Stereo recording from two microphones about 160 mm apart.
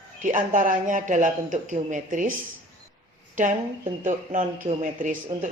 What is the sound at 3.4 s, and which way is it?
Speech, 55° right (ahead or behind).